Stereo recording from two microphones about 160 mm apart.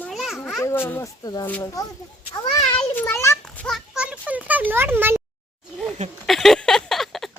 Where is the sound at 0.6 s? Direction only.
15° left (ahead or behind).